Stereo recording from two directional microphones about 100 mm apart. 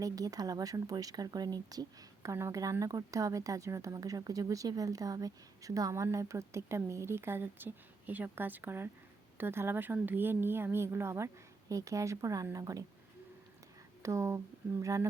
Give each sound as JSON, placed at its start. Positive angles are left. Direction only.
{"t": 0.0, "sound": "a woman's voice", "side_deg": -35}
{"t": 14.0, "sound": "speech", "side_deg": -30}